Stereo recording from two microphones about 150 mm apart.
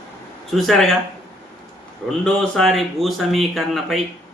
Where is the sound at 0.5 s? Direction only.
Centre (ahead or behind).